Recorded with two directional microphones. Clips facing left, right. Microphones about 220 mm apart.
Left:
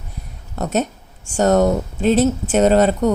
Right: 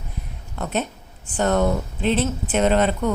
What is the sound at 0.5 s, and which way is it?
Speech, 40° left (ahead or behind).